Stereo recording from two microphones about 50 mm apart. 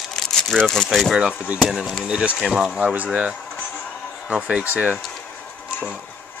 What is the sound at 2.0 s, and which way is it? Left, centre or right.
Speech, centre.